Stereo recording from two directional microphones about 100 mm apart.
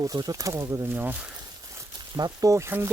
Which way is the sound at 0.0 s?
40° right (ahead or behind).